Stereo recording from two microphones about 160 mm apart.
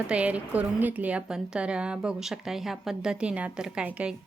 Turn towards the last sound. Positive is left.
turn(degrees=-5)  # may be behind; listen again after turning